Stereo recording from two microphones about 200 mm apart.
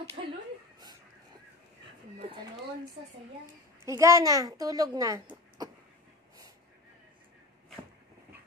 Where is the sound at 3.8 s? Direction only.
15° right (ahead or behind).